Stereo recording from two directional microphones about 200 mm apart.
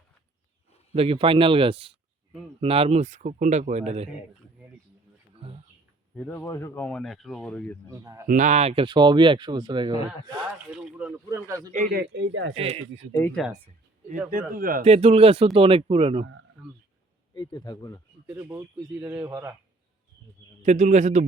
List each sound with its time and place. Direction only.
0.9 s a man's voice: 30° right (ahead or behind)
6.1 s speech: 10° left (ahead or behind)
7.9 s speech: 15° right (ahead or behind)
8.3 s speech: 40° right (ahead or behind); by 10.4 s 25° right (ahead or behind)
10.7 s speech: 5° right (ahead or behind)
11.7 s speech: 50° right (ahead or behind); by 12.5 s 65° right (ahead or behind)
12.5 s speech: 30° right (ahead or behind)
13.3 s speech: 5° right (ahead or behind)
14.5 s a man's voice: 45° right (ahead or behind)
14.8 s speech: 30° right (ahead or behind)
16.2 s speech: 75° right (ahead or behind)
17.3 s speech: 20° left (ahead or behind)
18.3 s speech: 10° right (ahead or behind)
20.6 s a man's voice: 35° right (ahead or behind)